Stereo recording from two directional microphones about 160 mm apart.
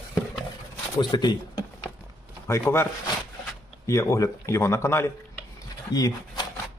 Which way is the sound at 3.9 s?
20° left (ahead or behind).